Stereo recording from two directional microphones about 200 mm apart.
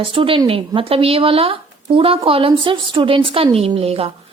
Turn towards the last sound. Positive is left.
turn(degrees=-30)  # may be behind; listen again after turning